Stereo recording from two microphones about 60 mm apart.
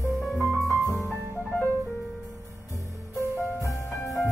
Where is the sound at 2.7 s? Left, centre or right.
Left.